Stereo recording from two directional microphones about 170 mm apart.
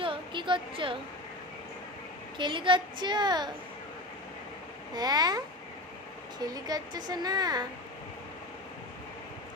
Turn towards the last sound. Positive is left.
turn(degrees=-25)  # may be behind; listen again after turning